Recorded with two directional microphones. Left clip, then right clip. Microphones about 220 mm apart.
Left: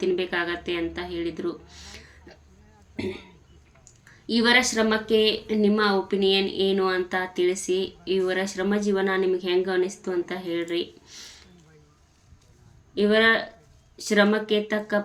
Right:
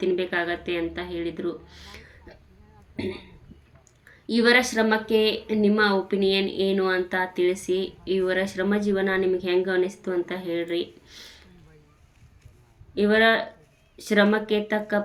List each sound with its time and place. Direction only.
0.0 s a woman's voice: centre (ahead or behind)
4.3 s a woman's voice: centre (ahead or behind)
12.9 s a woman's voice: centre (ahead or behind)